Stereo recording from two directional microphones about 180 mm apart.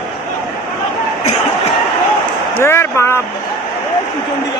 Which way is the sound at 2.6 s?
15° left (ahead or behind).